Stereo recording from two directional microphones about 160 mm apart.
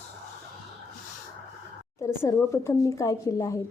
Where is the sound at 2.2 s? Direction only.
15° left (ahead or behind).